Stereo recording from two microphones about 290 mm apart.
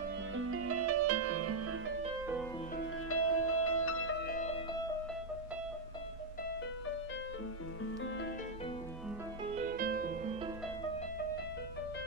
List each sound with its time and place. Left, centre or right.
0.4 s music: right
3.1 s music: left
4.3 s music: left
9.5 s music: right